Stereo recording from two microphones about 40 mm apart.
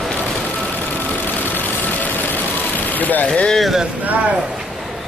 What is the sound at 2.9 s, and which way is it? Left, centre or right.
Vehicle, left.